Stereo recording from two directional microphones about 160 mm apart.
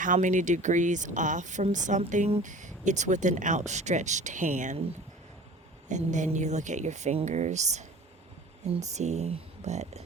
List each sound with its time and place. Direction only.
0.0 s speech: 50° right (ahead or behind)
5.9 s speech: 50° right (ahead or behind)